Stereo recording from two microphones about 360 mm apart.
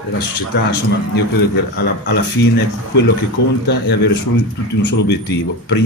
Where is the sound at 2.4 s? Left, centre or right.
Left.